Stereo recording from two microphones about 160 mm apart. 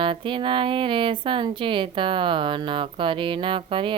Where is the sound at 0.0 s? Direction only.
30° right (ahead or behind).